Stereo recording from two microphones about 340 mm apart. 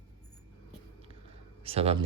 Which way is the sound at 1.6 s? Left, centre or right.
Centre.